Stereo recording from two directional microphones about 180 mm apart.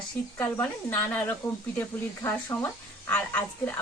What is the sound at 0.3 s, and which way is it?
Speech, 15° left (ahead or behind).